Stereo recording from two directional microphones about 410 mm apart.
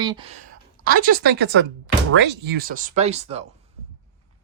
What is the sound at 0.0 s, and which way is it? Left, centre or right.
Speech, centre.